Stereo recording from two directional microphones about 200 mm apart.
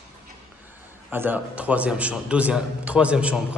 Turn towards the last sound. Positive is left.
turn(degrees=-5)  # may be behind; listen again after turning